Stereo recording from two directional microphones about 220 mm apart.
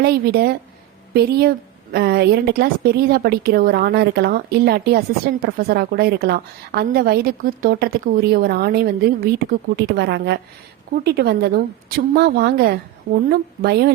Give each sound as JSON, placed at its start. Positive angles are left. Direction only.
{"t": 0.0, "sound": "a woman's voice", "side_deg": -45}